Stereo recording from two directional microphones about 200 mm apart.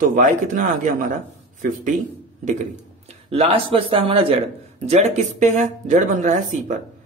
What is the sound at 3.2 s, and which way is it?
Speech, 30° right (ahead or behind).